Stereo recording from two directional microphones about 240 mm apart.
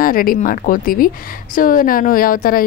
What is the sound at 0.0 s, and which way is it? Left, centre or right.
A woman's voice, left.